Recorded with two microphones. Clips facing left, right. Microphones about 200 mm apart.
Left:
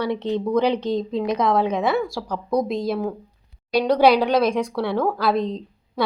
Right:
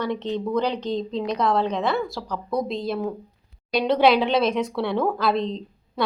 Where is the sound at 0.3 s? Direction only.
20° left (ahead or behind).